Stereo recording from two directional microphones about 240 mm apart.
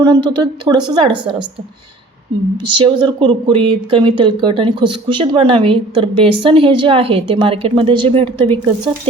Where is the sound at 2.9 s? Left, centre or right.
Centre.